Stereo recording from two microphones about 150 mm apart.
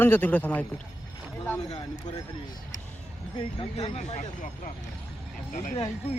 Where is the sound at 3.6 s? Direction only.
40° left (ahead or behind).